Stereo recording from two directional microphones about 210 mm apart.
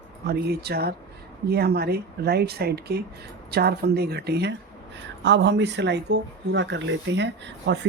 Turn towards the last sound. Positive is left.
turn(degrees=-55)  # may be behind; listen again after turning